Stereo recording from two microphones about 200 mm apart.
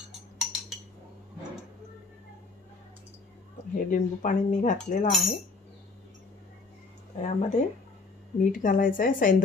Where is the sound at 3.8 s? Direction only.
40° left (ahead or behind).